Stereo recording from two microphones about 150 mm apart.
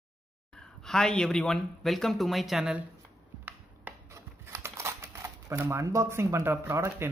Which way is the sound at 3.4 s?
15° right (ahead or behind).